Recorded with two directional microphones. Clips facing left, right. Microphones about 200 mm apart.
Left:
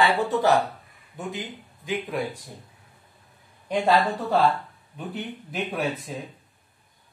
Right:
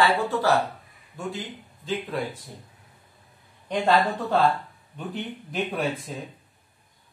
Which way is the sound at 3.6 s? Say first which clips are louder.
Left 1 dB; 10° left (ahead or behind).